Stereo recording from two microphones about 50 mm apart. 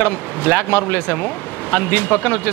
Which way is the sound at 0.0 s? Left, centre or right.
Left.